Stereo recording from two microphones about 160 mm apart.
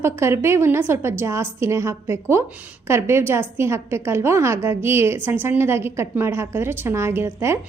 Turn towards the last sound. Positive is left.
turn(degrees=-15)  # may be behind; listen again after turning